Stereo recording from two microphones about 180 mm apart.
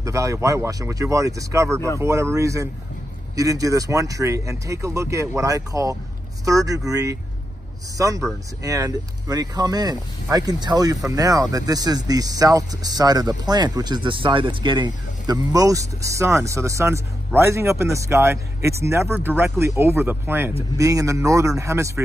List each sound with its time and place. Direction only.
0.0 s speech: 15° right (ahead or behind)
8.6 s speech: 20° right (ahead or behind)